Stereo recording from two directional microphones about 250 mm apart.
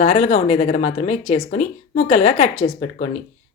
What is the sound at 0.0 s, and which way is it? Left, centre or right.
A woman's voice, left.